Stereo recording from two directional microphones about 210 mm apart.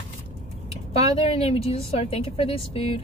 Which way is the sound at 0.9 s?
30° left (ahead or behind).